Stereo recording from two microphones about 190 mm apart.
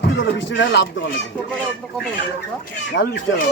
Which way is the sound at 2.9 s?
75° left (ahead or behind).